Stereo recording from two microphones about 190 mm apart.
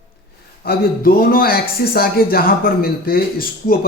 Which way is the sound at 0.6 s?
55° left (ahead or behind).